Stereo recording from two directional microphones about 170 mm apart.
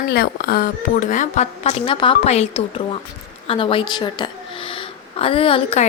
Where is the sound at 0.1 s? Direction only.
65° left (ahead or behind).